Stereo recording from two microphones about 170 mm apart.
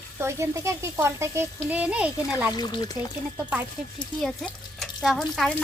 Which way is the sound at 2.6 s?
25° left (ahead or behind).